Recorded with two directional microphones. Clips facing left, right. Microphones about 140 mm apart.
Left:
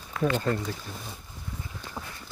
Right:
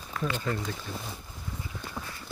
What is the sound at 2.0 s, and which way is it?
Clip-clop, 25° left (ahead or behind).